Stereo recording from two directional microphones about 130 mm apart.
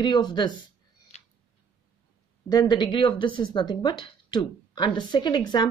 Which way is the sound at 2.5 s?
35° left (ahead or behind).